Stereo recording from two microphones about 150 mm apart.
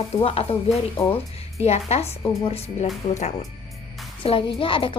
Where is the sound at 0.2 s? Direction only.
40° left (ahead or behind).